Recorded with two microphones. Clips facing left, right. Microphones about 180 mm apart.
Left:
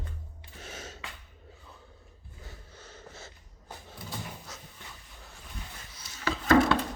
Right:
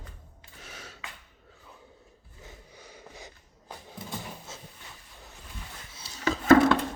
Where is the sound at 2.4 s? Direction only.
15° right (ahead or behind).